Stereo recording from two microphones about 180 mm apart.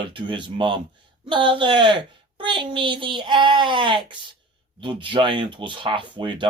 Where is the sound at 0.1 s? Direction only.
25° right (ahead or behind).